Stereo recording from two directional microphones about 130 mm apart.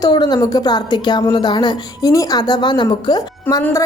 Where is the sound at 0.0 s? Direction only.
30° left (ahead or behind).